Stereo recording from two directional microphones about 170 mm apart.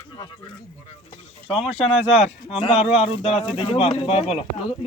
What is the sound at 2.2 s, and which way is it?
Speech, 35° left (ahead or behind).